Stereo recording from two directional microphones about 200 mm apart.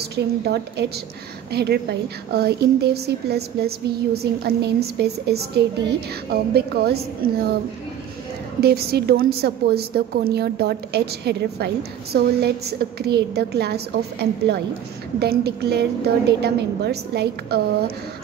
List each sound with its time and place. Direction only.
0.0 s a woman's voice: 55° right (ahead or behind)
8.5 s a woman's voice: 50° right (ahead or behind)
15.1 s a woman's voice: 55° right (ahead or behind)